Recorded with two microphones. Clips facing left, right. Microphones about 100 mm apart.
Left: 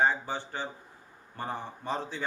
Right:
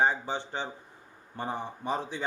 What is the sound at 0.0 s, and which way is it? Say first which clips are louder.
A man's voice: even; 20° right (ahead or behind).